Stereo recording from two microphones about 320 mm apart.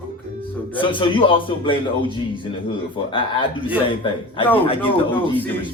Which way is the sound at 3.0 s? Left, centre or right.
Centre.